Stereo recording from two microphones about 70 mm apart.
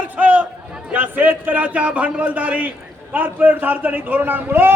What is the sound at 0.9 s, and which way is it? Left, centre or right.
A man's voice, right.